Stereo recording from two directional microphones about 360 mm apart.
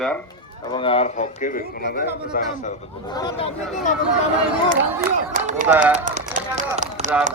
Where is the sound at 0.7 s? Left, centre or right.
Centre.